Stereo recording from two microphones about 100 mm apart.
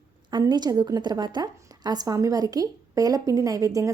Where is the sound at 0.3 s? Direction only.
45° right (ahead or behind).